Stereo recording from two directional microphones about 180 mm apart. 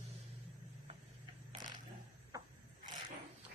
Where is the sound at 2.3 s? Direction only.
20° right (ahead or behind).